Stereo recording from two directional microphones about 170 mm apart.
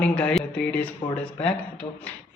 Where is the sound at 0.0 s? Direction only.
5° left (ahead or behind).